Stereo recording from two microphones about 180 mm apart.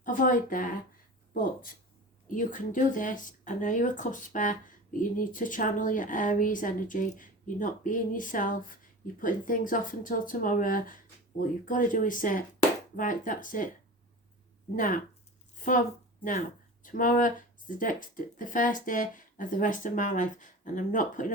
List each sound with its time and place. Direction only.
0.0 s speech: 50° left (ahead or behind)
14.8 s speech: 50° left (ahead or behind)
15.5 s a sound: 45° left (ahead or behind)
16.8 s speech: 50° left (ahead or behind)